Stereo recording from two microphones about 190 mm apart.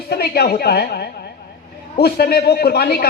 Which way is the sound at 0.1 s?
55° left (ahead or behind).